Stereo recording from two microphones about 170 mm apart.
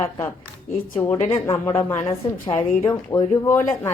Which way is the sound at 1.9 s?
35° left (ahead or behind).